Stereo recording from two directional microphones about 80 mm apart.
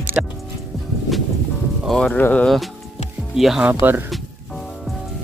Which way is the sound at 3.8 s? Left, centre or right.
Right.